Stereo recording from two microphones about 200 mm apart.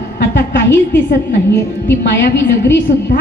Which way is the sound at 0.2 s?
60° left (ahead or behind).